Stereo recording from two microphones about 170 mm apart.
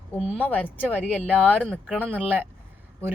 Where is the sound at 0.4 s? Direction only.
10° left (ahead or behind).